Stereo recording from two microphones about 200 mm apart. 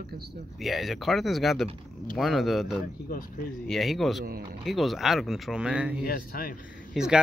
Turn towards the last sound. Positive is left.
turn(degrees=0)  # may be behind; listen again after turning